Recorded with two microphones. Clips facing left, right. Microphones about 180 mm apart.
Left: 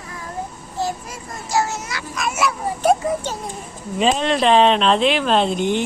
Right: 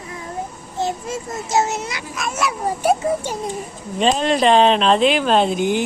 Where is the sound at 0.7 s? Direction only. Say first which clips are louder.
Right 2 dB; 25° right (ahead or behind).